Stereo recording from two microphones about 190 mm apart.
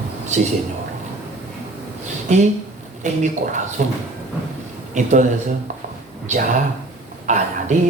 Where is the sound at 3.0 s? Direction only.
40° right (ahead or behind).